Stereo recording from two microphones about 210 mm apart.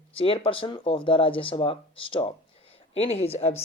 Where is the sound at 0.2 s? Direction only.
25° left (ahead or behind).